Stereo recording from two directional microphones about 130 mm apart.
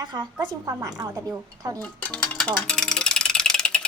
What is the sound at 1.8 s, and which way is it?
Music, 10° left (ahead or behind).